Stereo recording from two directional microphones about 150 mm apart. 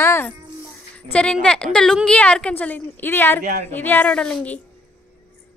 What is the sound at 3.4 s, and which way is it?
Speech, 60° right (ahead or behind).